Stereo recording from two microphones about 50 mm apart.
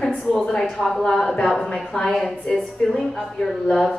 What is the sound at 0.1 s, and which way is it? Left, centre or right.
Speech, centre.